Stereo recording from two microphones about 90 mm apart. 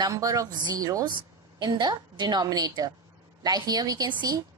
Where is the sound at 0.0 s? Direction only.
40° right (ahead or behind).